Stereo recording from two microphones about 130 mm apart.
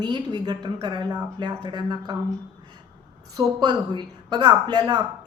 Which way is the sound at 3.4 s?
30° right (ahead or behind).